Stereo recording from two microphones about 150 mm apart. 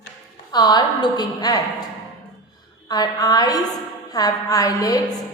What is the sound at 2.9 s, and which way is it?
A woman's voice, 25° left (ahead or behind).